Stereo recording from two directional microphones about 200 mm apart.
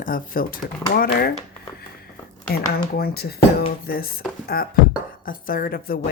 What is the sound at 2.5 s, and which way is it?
Speech, 50° left (ahead or behind).